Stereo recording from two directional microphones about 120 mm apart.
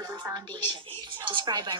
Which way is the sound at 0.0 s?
20° right (ahead or behind).